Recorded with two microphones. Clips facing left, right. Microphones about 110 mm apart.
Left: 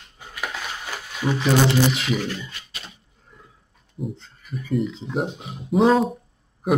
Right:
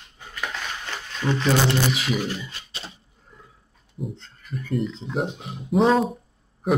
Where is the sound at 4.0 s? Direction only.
Centre (ahead or behind).